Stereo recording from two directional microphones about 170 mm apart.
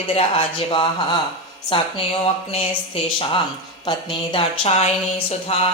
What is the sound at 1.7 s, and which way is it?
Speech, 30° left (ahead or behind).